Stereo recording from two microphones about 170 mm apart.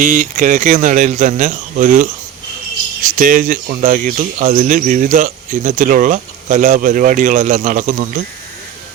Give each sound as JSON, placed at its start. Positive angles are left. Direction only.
{"t": 0.0, "sound": "speech", "side_deg": -50}
{"t": 3.2, "sound": "speech", "side_deg": -55}